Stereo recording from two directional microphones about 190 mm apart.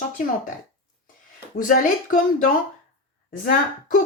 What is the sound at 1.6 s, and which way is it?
Speech, 45° left (ahead or behind).